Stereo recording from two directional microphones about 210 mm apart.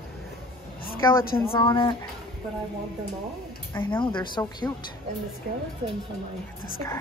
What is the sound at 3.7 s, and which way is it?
Speech, 10° left (ahead or behind).